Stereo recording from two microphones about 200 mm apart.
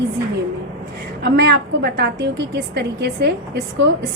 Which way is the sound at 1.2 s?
55° right (ahead or behind).